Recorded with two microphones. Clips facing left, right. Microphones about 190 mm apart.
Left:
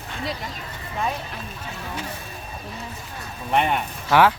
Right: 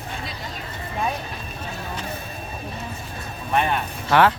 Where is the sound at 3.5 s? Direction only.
20° left (ahead or behind).